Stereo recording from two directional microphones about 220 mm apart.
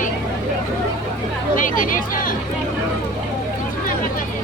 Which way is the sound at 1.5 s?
40° left (ahead or behind).